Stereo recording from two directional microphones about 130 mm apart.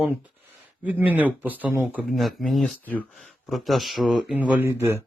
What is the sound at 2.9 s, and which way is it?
Speech, 10° left (ahead or behind).